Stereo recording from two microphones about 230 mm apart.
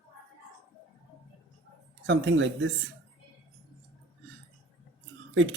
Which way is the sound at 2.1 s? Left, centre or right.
Right.